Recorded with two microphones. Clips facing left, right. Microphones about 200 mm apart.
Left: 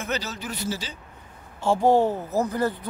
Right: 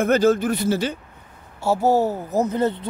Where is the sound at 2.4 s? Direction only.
20° right (ahead or behind).